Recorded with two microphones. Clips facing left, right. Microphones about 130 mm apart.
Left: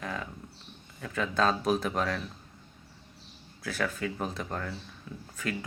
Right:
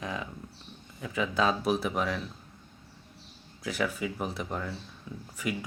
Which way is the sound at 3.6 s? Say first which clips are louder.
Right 1 dB; 15° right (ahead or behind).